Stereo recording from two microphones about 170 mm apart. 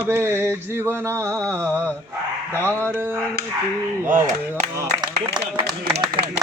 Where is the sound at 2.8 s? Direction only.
15° right (ahead or behind).